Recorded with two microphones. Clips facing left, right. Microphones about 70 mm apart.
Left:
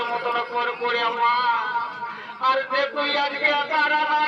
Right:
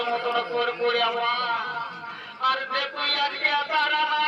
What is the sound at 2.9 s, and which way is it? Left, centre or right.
Speech, left.